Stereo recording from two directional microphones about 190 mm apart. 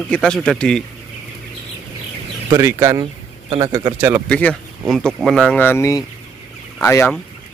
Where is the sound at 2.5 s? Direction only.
15° right (ahead or behind).